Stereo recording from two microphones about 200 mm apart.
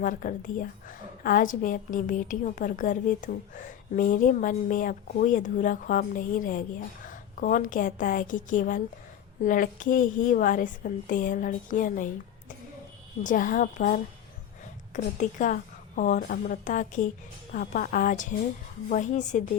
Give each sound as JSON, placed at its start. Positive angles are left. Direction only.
{"t": 0.0, "sound": "a woman's voice", "side_deg": 45}
{"t": 13.2, "sound": "a woman's voice", "side_deg": 45}